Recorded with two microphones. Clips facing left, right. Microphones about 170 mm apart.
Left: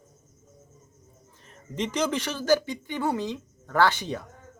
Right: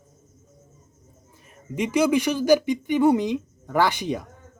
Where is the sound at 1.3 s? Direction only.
10° right (ahead or behind).